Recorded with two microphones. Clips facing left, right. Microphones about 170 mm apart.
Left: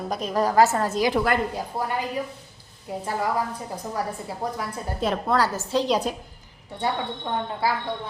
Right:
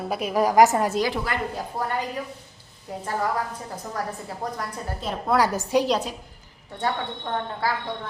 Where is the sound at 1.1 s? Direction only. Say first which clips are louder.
Left 6 dB; 50° left (ahead or behind).